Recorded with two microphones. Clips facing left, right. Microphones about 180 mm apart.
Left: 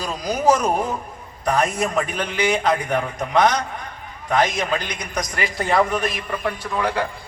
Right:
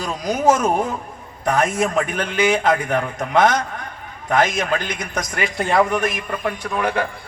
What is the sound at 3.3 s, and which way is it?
Speech, 50° right (ahead or behind).